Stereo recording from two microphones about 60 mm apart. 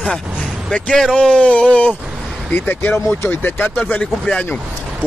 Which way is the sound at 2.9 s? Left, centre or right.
Left.